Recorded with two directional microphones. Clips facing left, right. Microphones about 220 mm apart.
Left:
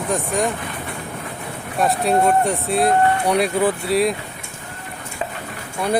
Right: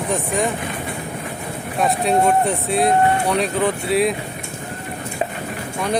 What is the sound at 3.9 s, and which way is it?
Speech, centre (ahead or behind).